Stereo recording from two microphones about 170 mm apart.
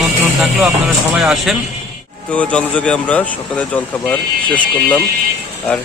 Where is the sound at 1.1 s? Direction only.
Centre (ahead or behind).